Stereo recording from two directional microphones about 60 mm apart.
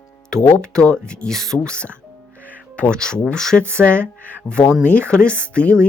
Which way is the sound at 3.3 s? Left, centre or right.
Centre.